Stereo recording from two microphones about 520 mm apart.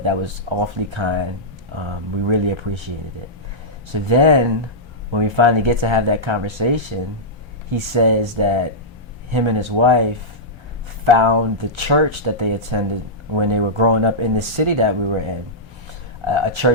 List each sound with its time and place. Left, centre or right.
0.0 s speech: right
3.9 s speech: right